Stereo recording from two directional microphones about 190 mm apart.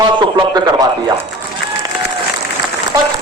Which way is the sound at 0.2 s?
20° right (ahead or behind).